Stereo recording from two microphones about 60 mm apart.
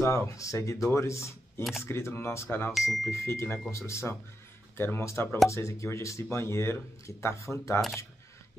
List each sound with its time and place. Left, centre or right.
0.0 s speech: left
2.7 s speech: centre
3.1 s speech: left
4.7 s speech: left
5.5 s speech: left